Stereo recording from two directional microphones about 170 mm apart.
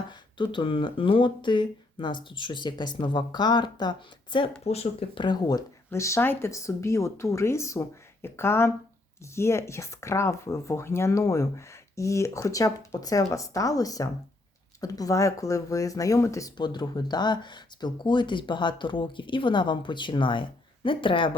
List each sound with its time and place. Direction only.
0.1 s speech: 30° left (ahead or behind)
4.6 s speech: 35° left (ahead or behind)